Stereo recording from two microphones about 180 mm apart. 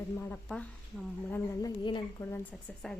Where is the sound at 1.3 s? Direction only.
20° left (ahead or behind).